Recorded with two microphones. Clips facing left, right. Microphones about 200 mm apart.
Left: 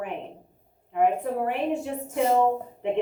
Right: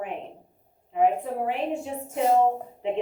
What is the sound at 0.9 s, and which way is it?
A woman's voice, 60° left (ahead or behind).